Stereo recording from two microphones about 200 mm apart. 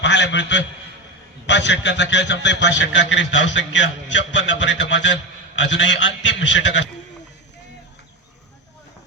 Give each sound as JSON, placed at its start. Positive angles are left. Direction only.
{"t": 0.0, "sound": "a man's voice", "side_deg": 60}